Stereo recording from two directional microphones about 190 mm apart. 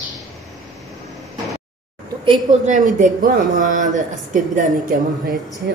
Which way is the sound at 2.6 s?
40° right (ahead or behind).